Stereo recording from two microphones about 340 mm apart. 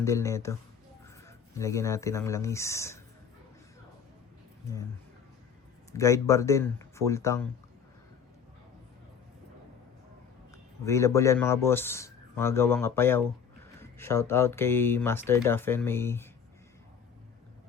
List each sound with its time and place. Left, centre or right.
0.0 s speech: centre
6.0 s speech: centre
10.8 s speech: centre